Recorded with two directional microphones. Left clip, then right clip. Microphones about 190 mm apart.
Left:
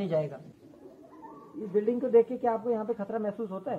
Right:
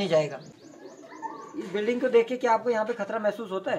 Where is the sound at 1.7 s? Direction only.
20° left (ahead or behind).